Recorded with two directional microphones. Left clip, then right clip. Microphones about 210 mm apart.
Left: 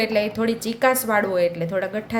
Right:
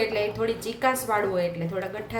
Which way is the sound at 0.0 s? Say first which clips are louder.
Left 4 dB; 50° left (ahead or behind).